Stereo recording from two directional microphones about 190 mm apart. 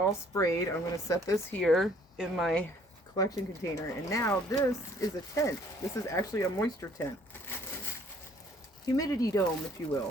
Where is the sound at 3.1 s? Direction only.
15° left (ahead or behind).